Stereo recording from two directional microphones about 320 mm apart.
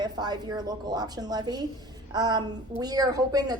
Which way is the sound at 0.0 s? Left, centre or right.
Centre.